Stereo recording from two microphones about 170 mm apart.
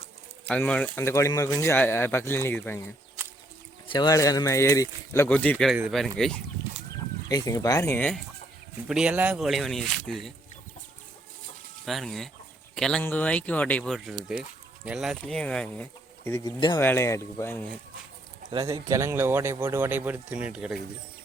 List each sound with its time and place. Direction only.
0.4 s speech: 5° left (ahead or behind)
3.8 s speech: 25° left (ahead or behind); by 6.4 s 5° left (ahead or behind)
7.3 s speech: 20° left (ahead or behind)
8.9 s speech: 5° right (ahead or behind)
11.9 s speech: centre (ahead or behind)
16.4 s speech: 25° left (ahead or behind)
16.7 s speech: 15° left (ahead or behind)
18.6 s speech: 20° right (ahead or behind)